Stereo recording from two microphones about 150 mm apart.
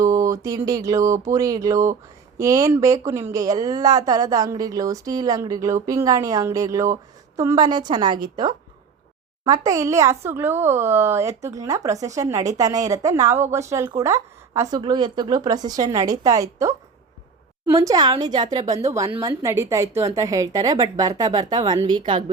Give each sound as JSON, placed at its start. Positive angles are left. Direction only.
{"t": 0.0, "sound": "a woman's voice", "side_deg": -20}